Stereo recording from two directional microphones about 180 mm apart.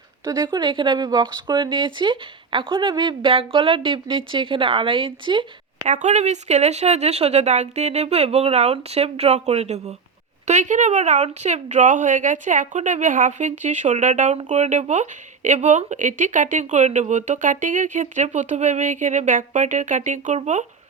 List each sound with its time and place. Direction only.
0.3 s speech: 25° right (ahead or behind)
5.9 s speech: 40° right (ahead or behind)